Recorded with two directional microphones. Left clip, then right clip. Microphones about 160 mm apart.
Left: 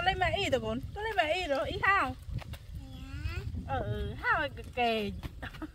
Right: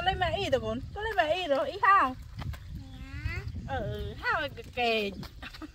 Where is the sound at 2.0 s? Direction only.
40° left (ahead or behind).